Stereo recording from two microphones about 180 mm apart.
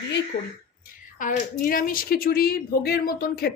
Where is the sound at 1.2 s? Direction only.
50° left (ahead or behind).